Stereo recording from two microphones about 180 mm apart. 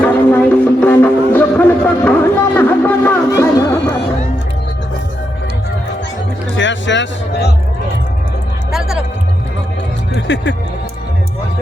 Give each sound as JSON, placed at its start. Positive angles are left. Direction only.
{"t": 0.0, "sound": "a sound", "side_deg": 10}
{"t": 2.6, "sound": "music", "side_deg": 10}
{"t": 6.6, "sound": "music", "side_deg": 90}
{"t": 8.7, "sound": "music", "side_deg": 0}
{"t": 10.2, "sound": "music", "side_deg": 85}